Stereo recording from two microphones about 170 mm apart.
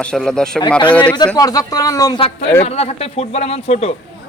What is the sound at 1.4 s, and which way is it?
Speech, 20° left (ahead or behind).